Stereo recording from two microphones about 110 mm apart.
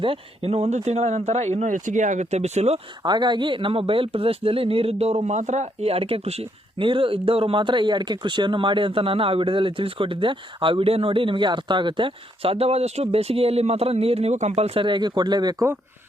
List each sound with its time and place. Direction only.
0.0 s speech: 60° right (ahead or behind); by 2.8 s 75° right (ahead or behind)
3.0 s speech: 40° right (ahead or behind); by 14.8 s 65° right (ahead or behind)
14.8 s speech: 45° right (ahead or behind)